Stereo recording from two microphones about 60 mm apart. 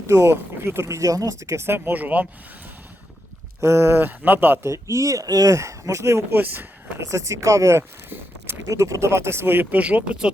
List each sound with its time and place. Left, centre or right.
0.1 s speech: right
0.9 s speech: right
3.6 s speech: right
4.7 s speech: right
6.3 s speech: right
7.0 s speech: right
9.7 s speech: right